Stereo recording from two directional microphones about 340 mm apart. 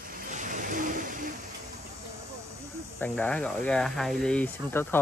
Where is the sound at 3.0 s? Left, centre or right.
Centre.